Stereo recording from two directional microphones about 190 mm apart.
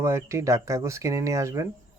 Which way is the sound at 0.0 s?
15° right (ahead or behind).